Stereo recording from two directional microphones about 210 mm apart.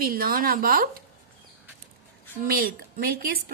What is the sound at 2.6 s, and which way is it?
Speech, 50° right (ahead or behind).